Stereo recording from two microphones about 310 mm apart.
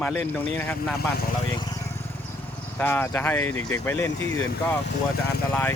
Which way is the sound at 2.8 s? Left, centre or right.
Centre.